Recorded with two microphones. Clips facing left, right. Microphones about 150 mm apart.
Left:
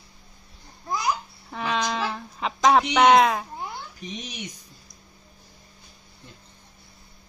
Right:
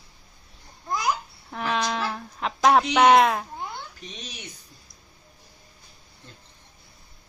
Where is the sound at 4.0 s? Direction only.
15° left (ahead or behind).